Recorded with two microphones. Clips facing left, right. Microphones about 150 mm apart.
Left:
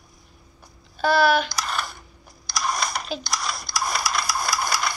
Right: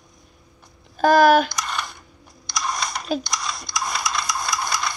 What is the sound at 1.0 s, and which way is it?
Speech, 45° right (ahead or behind).